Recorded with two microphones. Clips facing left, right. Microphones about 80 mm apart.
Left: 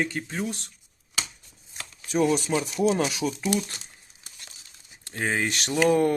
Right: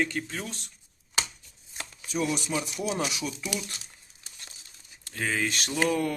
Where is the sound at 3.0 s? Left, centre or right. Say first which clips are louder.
Left 6 dB; left.